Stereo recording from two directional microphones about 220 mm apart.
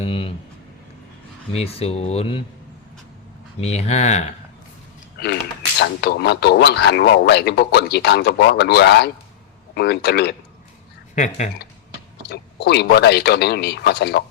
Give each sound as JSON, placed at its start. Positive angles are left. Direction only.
{"t": 0.0, "sound": "a sound", "side_deg": 25}
{"t": 1.5, "sound": "speech", "side_deg": 25}
{"t": 3.6, "sound": "speech", "side_deg": 30}
{"t": 5.8, "sound": "speech", "side_deg": 50}
{"t": 11.1, "sound": "speech", "side_deg": 35}
{"t": 12.2, "sound": "speech", "side_deg": 50}